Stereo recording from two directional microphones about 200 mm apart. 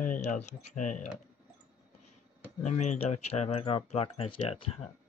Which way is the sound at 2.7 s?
35° left (ahead or behind).